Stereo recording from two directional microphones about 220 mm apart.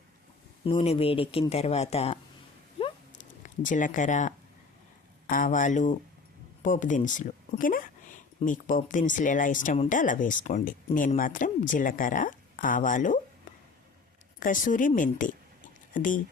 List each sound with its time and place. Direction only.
0.6 s speech: 25° left (ahead or behind)
2.7 s a sound: 30° left (ahead or behind)
5.3 s speech: 35° left (ahead or behind)
14.3 s speech: 40° left (ahead or behind)